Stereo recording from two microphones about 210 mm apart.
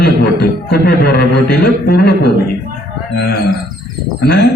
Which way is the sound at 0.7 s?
50° left (ahead or behind).